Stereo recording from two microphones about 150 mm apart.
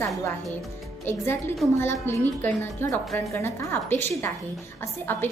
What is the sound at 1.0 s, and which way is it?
A woman's voice, 15° left (ahead or behind).